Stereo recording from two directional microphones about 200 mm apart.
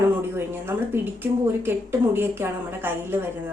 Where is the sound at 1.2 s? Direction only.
10° right (ahead or behind).